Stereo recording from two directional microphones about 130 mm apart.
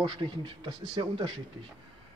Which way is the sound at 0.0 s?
40° right (ahead or behind).